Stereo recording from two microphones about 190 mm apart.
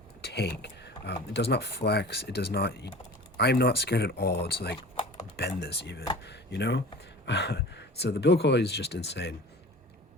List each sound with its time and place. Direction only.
0.2 s speech: 60° left (ahead or behind)